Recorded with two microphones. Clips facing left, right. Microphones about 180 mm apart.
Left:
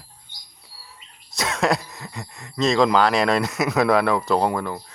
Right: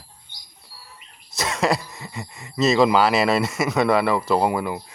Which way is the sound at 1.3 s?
Centre (ahead or behind).